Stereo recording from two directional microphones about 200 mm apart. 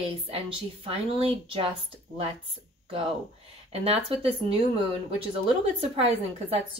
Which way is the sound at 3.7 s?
30° right (ahead or behind).